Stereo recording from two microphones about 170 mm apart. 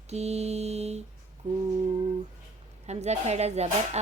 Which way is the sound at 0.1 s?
40° right (ahead or behind).